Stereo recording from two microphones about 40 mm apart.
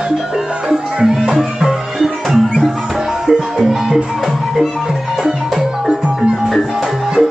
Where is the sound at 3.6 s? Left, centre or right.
Centre.